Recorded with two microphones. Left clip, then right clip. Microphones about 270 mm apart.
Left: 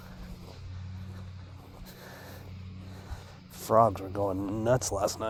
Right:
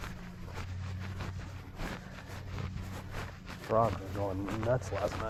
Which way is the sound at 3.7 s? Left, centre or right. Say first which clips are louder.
Left 6 dB; left.